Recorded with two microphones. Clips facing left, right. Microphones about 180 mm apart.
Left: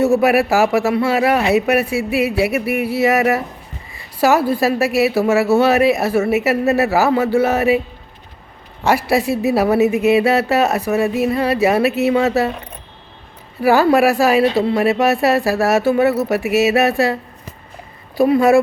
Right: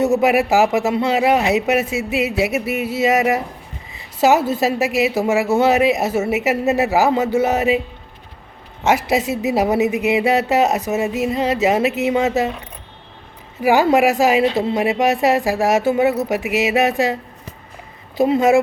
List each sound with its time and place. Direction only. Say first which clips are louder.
0.0 s speech: left 2 dB; 20° right (ahead or behind)
8.8 s speech: left 1 dB; 20° right (ahead or behind)
13.6 s speech: left 1 dB; 15° right (ahead or behind)
18.2 s speech: left 2 dB; 20° right (ahead or behind)